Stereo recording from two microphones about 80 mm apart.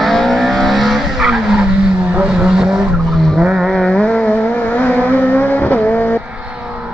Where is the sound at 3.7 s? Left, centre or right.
Centre.